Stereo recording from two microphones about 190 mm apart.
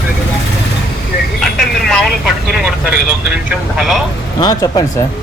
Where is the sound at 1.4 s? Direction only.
Centre (ahead or behind).